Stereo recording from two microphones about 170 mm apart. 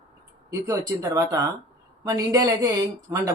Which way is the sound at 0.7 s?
20° right (ahead or behind).